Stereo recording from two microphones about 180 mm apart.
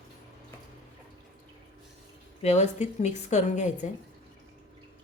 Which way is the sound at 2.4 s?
40° left (ahead or behind).